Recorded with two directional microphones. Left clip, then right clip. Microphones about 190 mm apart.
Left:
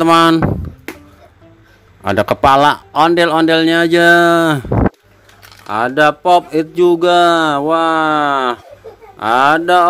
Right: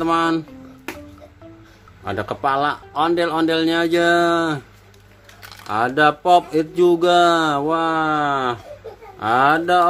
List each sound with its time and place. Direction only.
0.0 s speech: 45° left (ahead or behind)
2.0 s speech: 45° left (ahead or behind)
5.7 s speech: 40° left (ahead or behind)